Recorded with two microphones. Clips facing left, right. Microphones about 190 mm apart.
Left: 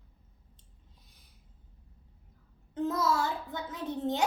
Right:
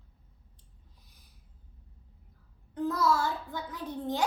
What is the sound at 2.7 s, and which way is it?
A child's voice, 20° left (ahead or behind).